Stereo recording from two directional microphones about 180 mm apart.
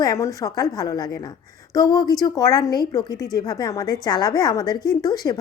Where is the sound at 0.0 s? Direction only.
20° left (ahead or behind).